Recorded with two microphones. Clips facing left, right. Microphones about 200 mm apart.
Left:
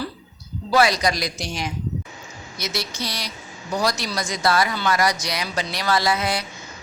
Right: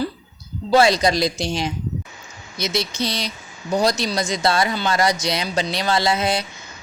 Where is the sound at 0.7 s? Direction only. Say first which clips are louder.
Right 4 dB; 25° right (ahead or behind).